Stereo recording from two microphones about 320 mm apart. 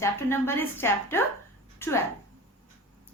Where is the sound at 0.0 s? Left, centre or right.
Centre.